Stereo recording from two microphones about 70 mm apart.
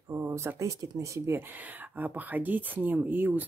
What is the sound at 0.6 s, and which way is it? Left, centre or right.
Speech, right.